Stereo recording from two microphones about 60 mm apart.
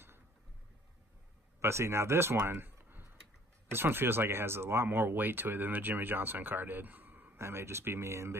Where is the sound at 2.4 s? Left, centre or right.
Right.